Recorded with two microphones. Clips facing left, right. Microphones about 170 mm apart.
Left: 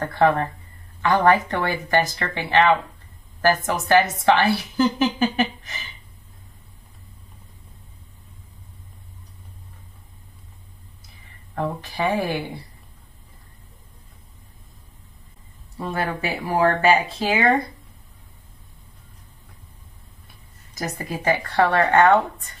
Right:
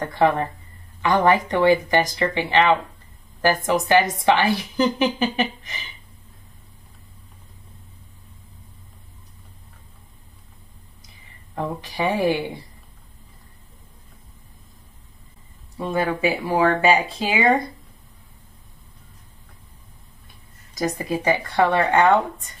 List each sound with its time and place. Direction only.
0.0 s speech: 15° right (ahead or behind)
11.5 s speech: 15° right (ahead or behind)
15.8 s speech: 15° right (ahead or behind)
20.7 s speech: 15° right (ahead or behind)